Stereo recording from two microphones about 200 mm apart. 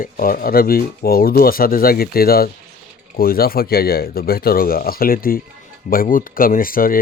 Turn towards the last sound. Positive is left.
turn(degrees=45)  # may be behind; listen again after turning